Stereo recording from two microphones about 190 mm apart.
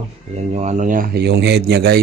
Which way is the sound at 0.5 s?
40° right (ahead or behind).